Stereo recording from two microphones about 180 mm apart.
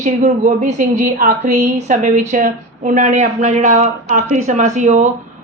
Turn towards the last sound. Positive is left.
turn(degrees=-40)  # may be behind; listen again after turning